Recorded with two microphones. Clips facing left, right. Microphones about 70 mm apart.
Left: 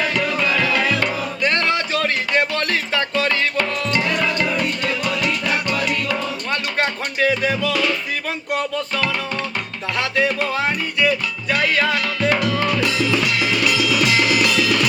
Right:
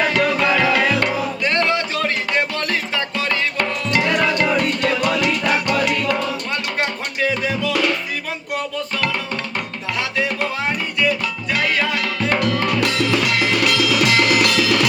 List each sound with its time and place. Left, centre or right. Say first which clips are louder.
0.1 s music: right 3 dB; right
1.5 s music: right 3 dB; right
4.9 s music: right 3 dB; right
6.5 s music: left 1 dB; centre
12.8 s music: right 1 dB; right